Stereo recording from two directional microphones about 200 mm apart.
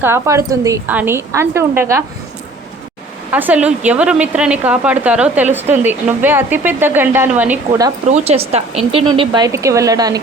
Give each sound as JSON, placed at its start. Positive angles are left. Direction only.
{"t": 0.0, "sound": "a woman's voice", "side_deg": -15}
{"t": 3.3, "sound": "a woman's voice", "side_deg": -10}
{"t": 8.1, "sound": "speech", "side_deg": -30}